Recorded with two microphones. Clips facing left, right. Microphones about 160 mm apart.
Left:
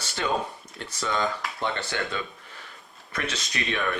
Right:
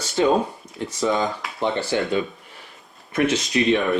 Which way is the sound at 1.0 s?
20° right (ahead or behind).